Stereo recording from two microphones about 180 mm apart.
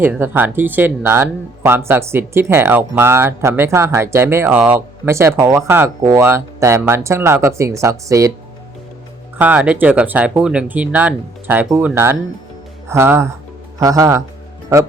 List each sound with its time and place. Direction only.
0.0 s speech: 10° right (ahead or behind)
9.4 s speech: 10° right (ahead or behind)